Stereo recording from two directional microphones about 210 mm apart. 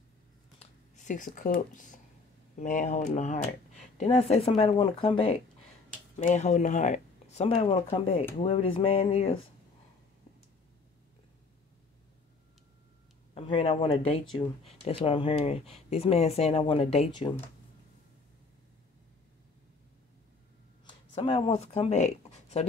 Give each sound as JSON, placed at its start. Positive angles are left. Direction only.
{"t": 0.6, "sound": "speech", "side_deg": 35}
{"t": 13.3, "sound": "speech", "side_deg": 25}
{"t": 20.8, "sound": "speech", "side_deg": 25}